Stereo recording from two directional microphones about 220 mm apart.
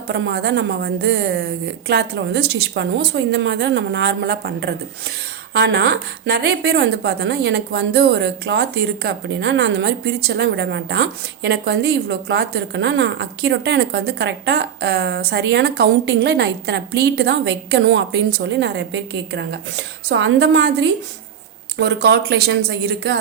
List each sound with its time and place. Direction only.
0.1 s a woman's voice: 50° right (ahead or behind)
21.8 s a woman's voice: 50° right (ahead or behind)